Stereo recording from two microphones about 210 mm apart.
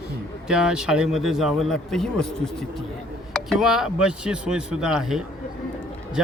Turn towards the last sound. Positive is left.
turn(degrees=-5)  # may be behind; listen again after turning